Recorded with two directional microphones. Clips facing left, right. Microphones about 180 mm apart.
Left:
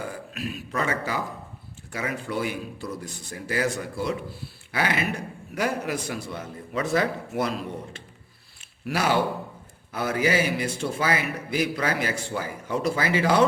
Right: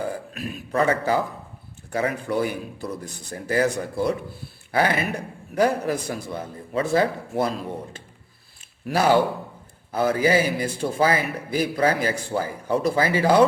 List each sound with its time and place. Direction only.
0.0 s a man's voice: 40° right (ahead or behind)
8.9 s a man's voice: 40° right (ahead or behind)